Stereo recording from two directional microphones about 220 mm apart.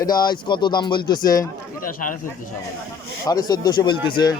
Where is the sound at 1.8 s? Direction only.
40° left (ahead or behind).